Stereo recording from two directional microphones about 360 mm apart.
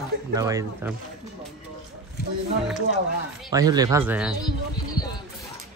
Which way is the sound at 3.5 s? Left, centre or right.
Centre.